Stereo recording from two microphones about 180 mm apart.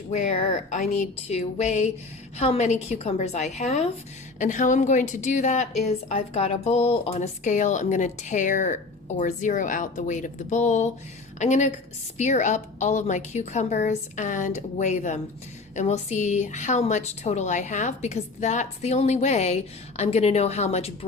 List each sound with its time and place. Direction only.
0.1 s a woman's voice: 40° left (ahead or behind)